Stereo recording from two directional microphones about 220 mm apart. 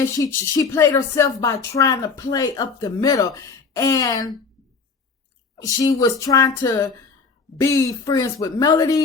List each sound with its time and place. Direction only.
0.2 s speech: 15° left (ahead or behind)
5.6 s speech: 15° left (ahead or behind)